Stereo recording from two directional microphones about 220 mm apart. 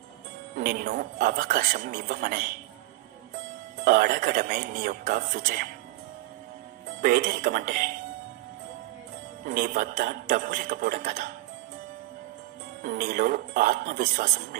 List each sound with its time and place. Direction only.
0.6 s a man's voice: 40° right (ahead or behind)
3.8 s a man's voice: 40° right (ahead or behind)
7.0 s a man's voice: 40° right (ahead or behind)
9.5 s a man's voice: 40° right (ahead or behind)
12.8 s a man's voice: 40° right (ahead or behind)